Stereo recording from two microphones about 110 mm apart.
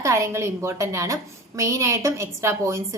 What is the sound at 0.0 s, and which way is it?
A woman's voice, 25° right (ahead or behind).